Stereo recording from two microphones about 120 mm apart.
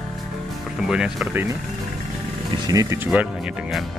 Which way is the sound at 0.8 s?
5° right (ahead or behind).